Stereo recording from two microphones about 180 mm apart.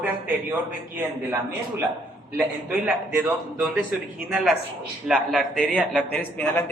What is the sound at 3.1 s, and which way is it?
A man's voice, 10° right (ahead or behind).